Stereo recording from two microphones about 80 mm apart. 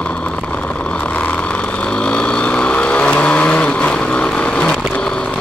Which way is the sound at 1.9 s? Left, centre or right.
Centre.